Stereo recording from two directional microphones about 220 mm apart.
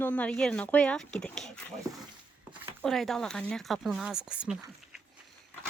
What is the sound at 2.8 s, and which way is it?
Speech, centre (ahead or behind).